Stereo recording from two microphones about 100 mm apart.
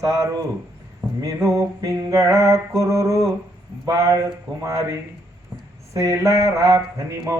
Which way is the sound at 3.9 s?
35° right (ahead or behind).